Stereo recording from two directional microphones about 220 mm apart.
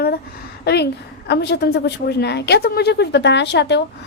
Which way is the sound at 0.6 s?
50° left (ahead or behind).